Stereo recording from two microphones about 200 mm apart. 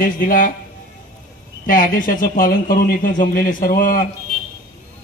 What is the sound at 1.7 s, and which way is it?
A man's voice, 45° left (ahead or behind).